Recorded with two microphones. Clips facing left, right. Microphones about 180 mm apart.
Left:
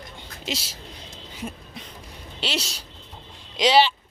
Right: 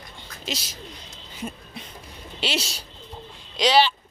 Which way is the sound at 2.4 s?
5° right (ahead or behind).